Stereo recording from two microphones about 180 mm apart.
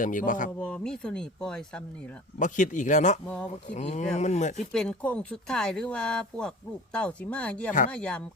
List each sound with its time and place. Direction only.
0.0 s speech: 45° left (ahead or behind)
0.6 s speech: 5° left (ahead or behind)
2.4 s speech: 45° left (ahead or behind)
4.7 s speech: 5° left (ahead or behind)